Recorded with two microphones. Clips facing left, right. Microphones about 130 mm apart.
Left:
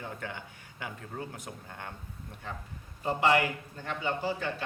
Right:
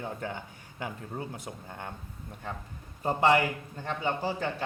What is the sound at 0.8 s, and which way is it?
Speech, 25° right (ahead or behind).